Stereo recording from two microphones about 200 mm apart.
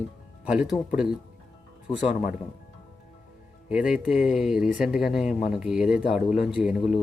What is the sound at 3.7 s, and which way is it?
Speech, 5° right (ahead or behind).